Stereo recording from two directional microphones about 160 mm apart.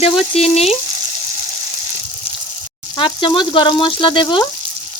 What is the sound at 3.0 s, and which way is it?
Speech, 30° left (ahead or behind).